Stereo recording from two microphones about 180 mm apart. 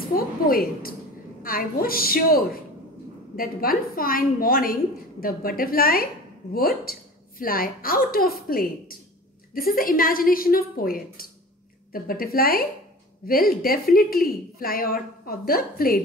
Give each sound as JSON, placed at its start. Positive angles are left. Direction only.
{"t": 0.1, "sound": "a woman's voice", "side_deg": 55}